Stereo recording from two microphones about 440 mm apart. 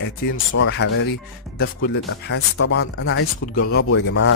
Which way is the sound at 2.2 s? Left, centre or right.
Left.